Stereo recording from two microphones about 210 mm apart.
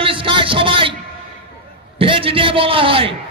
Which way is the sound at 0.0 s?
25° right (ahead or behind).